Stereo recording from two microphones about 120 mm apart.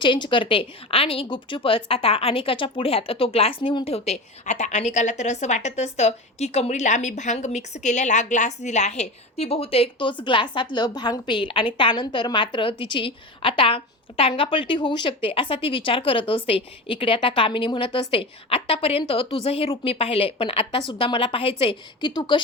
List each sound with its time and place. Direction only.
0.0 s a woman's voice: 40° left (ahead or behind)
22.1 s speech: 40° left (ahead or behind)